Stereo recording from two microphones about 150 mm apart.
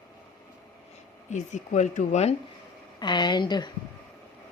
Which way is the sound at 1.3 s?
55° left (ahead or behind).